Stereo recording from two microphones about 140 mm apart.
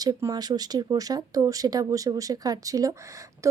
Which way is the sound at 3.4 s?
20° right (ahead or behind).